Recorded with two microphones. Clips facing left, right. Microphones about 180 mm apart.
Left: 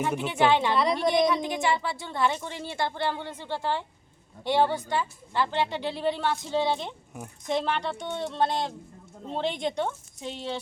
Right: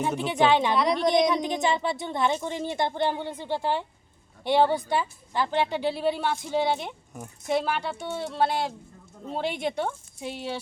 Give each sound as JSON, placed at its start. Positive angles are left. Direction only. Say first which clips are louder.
{"t": 0.3, "sound": "a woman's voice", "louder": "right 1 dB", "side_deg": -15}
{"t": 0.8, "sound": "a woman's voice", "louder": "right 1 dB", "side_deg": 0}
{"t": 1.3, "sound": "a woman's voice", "louder": "right 1 dB", "side_deg": -20}